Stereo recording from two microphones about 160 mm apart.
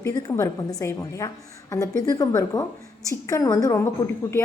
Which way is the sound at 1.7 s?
20° left (ahead or behind).